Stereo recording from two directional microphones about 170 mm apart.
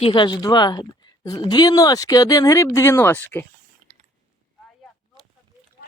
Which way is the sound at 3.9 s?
45° right (ahead or behind).